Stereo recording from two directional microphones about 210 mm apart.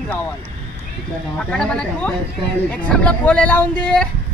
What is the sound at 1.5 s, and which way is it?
Speech, 5° left (ahead or behind).